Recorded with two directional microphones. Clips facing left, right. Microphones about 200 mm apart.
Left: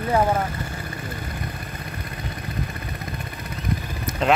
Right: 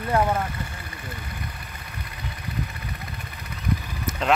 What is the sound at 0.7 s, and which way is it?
Vehicle, 45° left (ahead or behind).